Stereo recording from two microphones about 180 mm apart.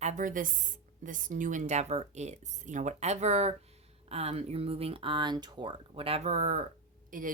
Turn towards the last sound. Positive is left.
turn(degrees=-50)  # may be behind; listen again after turning